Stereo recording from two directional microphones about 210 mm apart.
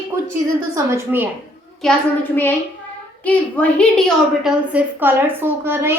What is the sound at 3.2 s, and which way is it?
Speech, 5° left (ahead or behind).